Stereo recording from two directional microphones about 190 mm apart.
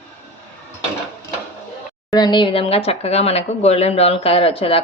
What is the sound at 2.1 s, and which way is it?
Speech, 20° left (ahead or behind).